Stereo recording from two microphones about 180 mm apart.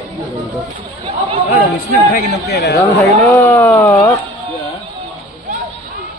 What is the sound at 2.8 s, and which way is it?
Speech, 15° left (ahead or behind).